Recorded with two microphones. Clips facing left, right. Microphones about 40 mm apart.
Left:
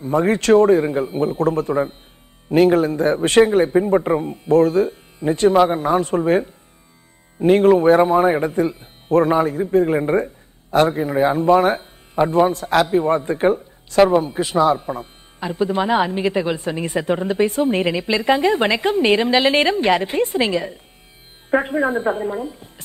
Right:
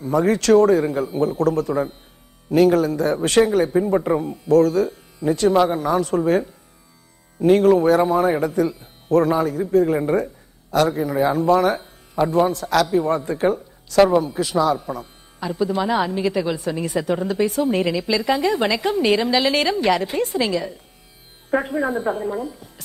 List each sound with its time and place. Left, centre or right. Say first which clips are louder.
0.0 s a man's voice: left 1 dB; left